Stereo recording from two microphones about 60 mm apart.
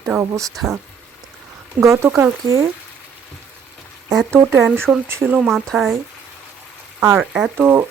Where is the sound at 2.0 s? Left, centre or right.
Right.